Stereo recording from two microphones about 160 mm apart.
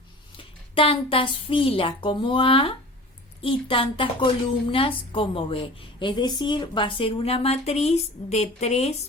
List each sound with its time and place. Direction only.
0.3 s a woman's voice: 35° left (ahead or behind)